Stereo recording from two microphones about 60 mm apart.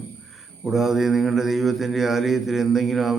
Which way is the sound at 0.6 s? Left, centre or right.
Centre.